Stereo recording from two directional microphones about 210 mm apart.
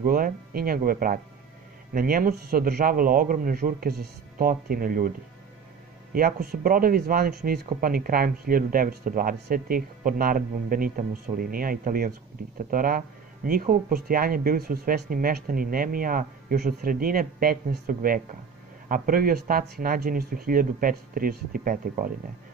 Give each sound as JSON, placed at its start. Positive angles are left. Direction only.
{"t": 0.0, "sound": "speech", "side_deg": -45}
{"t": 6.1, "sound": "speech", "side_deg": -45}